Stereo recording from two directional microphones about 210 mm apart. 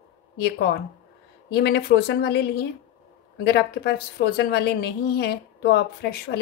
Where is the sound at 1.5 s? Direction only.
50° left (ahead or behind).